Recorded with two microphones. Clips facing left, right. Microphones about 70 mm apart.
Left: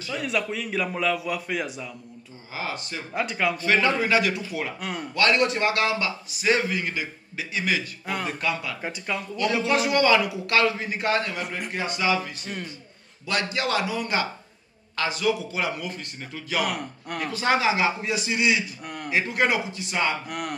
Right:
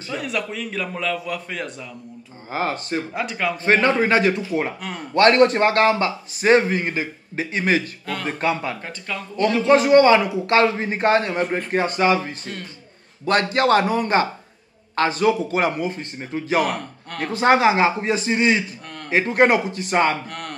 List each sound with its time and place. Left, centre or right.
0.2 s a man's voice: centre
2.5 s a man's voice: right
3.1 s a man's voice: centre
3.6 s a man's voice: right
8.8 s speech: centre
9.6 s a man's voice: right
16.6 s a man's voice: centre
17.2 s a man's voice: right
20.2 s a sound: centre